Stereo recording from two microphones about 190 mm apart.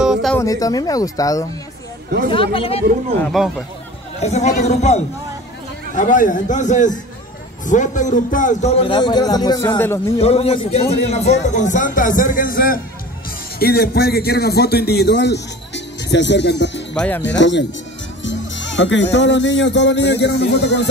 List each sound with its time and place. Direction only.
0.0 s music: centre (ahead or behind)
0.4 s speech: 20° left (ahead or behind)
3.3 s speech: centre (ahead or behind)
4.2 s a man's voice: 35° left (ahead or behind); by 10.1 s 15° left (ahead or behind)
10.1 s a man's voice: 30° left (ahead or behind); by 17.6 s 70° left (ahead or behind)
18.2 s music: 75° left (ahead or behind)
19.1 s a man's voice: 70° left (ahead or behind)